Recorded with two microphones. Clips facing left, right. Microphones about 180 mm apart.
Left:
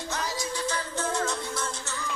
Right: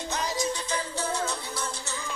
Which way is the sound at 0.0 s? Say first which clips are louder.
Right 3 dB; 20° right (ahead or behind).